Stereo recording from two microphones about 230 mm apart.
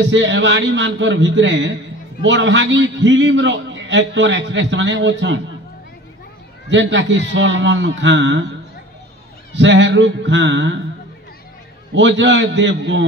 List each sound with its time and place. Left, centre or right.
0.1 s a man's voice: right
6.7 s a man's voice: right
9.5 s a man's voice: right
11.9 s a man's voice: right